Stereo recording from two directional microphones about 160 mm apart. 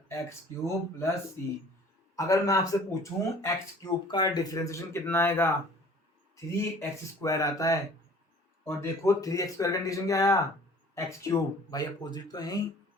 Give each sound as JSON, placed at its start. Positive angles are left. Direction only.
{"t": 0.1, "sound": "speech", "side_deg": 15}